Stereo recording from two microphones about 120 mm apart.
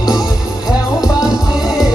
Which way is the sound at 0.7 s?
30° left (ahead or behind).